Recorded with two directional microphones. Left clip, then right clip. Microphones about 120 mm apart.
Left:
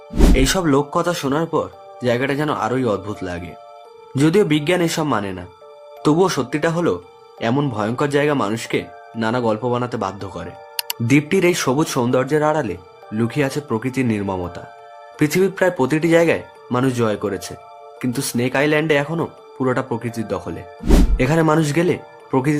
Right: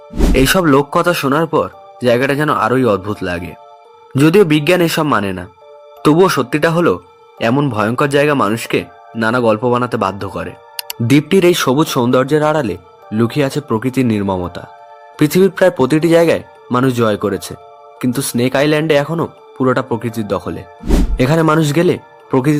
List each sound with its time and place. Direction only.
0.1 s music: centre (ahead or behind)
0.3 s speech: 30° right (ahead or behind)
20.8 s speech: centre (ahead or behind)
21.2 s speech: 35° right (ahead or behind)